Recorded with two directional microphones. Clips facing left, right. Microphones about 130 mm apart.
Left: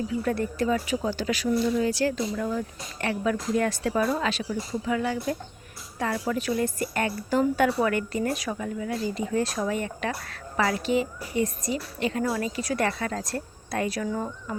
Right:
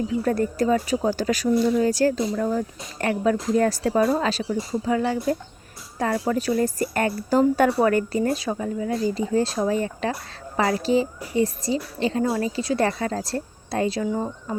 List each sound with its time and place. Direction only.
0.2 s speech: 40° right (ahead or behind); by 14.3 s 25° right (ahead or behind)